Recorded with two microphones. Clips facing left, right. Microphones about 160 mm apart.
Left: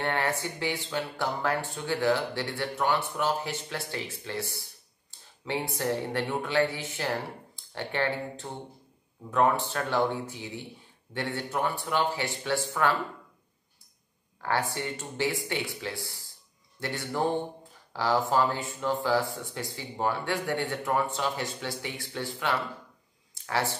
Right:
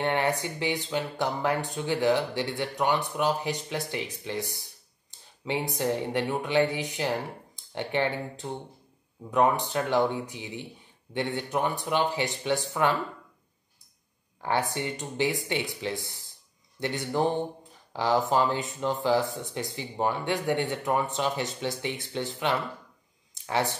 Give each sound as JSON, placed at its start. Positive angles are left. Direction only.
{"t": 0.0, "sound": "speech", "side_deg": -15}
{"t": 14.4, "sound": "speech", "side_deg": -20}
{"t": 23.3, "sound": "a sound", "side_deg": -20}